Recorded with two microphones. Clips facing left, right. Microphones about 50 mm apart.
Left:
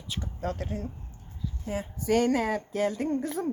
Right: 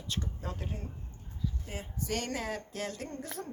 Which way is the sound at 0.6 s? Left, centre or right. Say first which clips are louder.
Left 7 dB; left.